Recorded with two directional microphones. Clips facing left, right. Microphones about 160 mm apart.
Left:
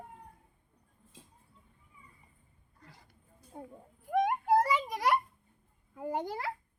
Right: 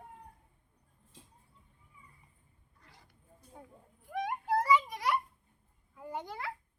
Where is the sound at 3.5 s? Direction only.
30° left (ahead or behind).